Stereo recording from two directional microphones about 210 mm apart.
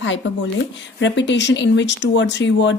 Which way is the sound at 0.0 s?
60° left (ahead or behind).